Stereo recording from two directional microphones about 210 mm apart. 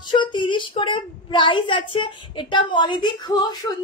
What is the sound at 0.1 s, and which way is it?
A woman's voice, 20° left (ahead or behind).